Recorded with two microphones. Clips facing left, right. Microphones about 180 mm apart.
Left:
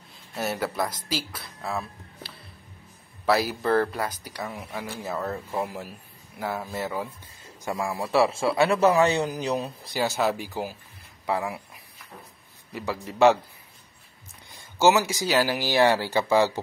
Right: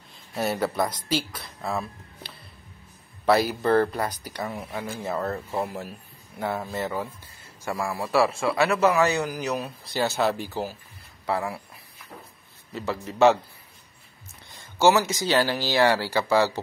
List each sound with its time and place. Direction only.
0.4 s speech: centre (ahead or behind); by 9.7 s 25° left (ahead or behind)
9.9 s speech: 10° left (ahead or behind)
12.7 s speech: 15° left (ahead or behind)
14.6 s speech: 15° left (ahead or behind)